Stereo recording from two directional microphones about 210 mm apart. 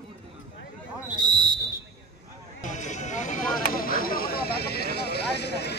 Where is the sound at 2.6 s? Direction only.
35° left (ahead or behind).